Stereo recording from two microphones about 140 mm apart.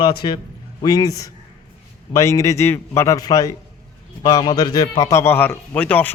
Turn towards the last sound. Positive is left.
turn(degrees=10)  # may be behind; listen again after turning